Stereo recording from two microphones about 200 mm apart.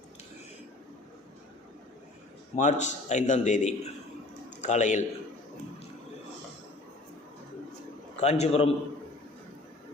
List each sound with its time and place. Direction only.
2.6 s a man's voice: 35° left (ahead or behind)
4.4 s a sound: 35° left (ahead or behind)
8.1 s a man's voice: 30° left (ahead or behind)